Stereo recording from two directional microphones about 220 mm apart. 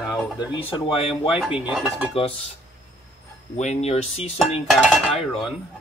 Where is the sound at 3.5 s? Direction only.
30° left (ahead or behind).